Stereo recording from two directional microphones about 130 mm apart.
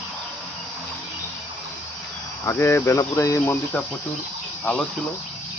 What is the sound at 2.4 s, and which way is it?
Speech, 20° left (ahead or behind).